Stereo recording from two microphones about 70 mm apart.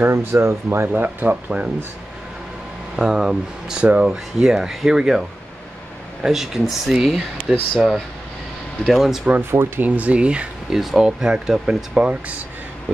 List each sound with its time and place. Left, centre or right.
0.0 s speech: right
1.0 s speech: right
3.0 s speech: centre
6.2 s speech: centre
9.5 s speech: right
9.8 s speech: right
10.7 s speech: centre